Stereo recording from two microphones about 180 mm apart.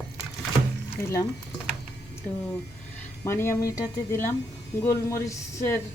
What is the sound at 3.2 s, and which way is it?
Speech, 15° left (ahead or behind).